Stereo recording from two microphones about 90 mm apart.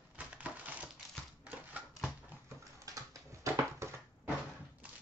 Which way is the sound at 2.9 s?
35° right (ahead or behind).